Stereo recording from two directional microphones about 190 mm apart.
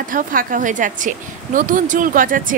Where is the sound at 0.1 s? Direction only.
45° right (ahead or behind).